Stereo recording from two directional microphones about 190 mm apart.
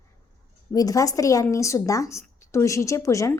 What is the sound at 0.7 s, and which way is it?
A woman's voice, 20° left (ahead or behind).